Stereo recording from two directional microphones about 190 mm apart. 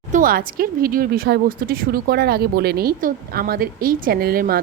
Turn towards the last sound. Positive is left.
turn(degrees=-50)  # may be behind; listen again after turning